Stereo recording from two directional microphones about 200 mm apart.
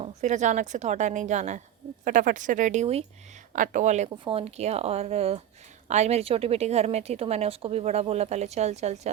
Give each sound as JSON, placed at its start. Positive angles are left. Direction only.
{"t": 0.0, "sound": "a woman's voice", "side_deg": -35}